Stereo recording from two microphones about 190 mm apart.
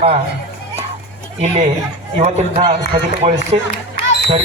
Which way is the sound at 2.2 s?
35° right (ahead or behind).